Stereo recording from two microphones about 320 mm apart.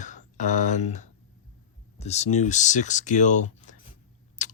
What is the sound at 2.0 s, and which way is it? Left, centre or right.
Speech, left.